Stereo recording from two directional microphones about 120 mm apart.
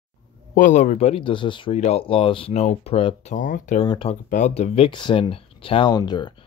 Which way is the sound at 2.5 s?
65° left (ahead or behind).